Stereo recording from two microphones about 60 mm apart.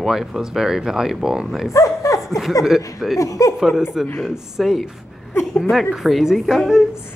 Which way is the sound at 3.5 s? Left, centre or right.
Centre.